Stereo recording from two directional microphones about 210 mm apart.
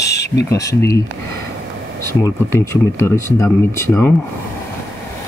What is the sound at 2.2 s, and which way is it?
Speech, 15° left (ahead or behind).